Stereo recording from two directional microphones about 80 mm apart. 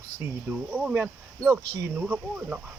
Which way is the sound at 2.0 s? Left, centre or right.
Centre.